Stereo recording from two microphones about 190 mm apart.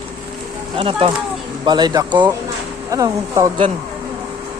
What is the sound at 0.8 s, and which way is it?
Speech, 30° right (ahead or behind).